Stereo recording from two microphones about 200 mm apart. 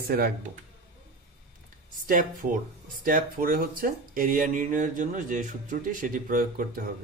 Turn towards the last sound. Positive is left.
turn(degrees=-45)  # may be behind; listen again after turning